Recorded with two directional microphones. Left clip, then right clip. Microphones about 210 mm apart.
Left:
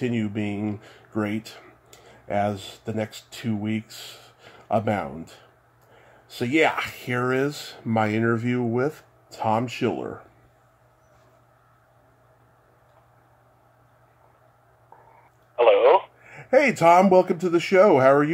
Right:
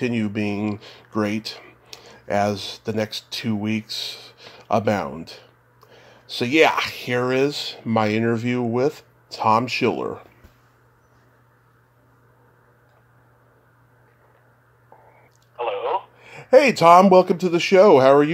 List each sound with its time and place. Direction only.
0.0 s speech: 10° right (ahead or behind)
15.5 s radio: 25° left (ahead or behind)
16.3 s speech: 10° right (ahead or behind)